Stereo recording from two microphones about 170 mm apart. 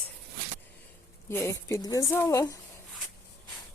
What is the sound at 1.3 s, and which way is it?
A woman's voice, 15° left (ahead or behind).